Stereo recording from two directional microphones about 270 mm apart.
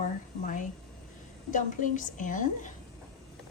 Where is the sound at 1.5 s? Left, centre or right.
Left.